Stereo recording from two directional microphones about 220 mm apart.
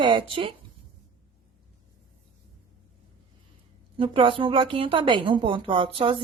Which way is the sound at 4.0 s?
20° right (ahead or behind).